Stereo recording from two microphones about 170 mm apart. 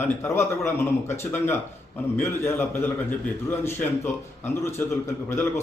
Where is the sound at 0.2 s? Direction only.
15° left (ahead or behind).